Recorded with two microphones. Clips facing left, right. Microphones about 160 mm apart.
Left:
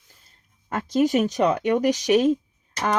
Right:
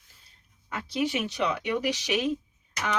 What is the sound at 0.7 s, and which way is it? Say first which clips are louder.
Speech: left 8 dB; 45° left (ahead or behind).